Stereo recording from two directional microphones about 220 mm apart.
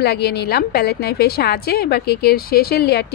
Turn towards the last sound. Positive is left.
turn(degrees=50)  # may be behind; listen again after turning